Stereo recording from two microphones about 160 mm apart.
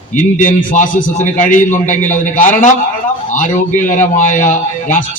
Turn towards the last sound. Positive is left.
turn(degrees=55)  # may be behind; listen again after turning